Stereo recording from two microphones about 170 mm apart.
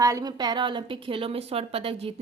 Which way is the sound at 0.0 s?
20° right (ahead or behind).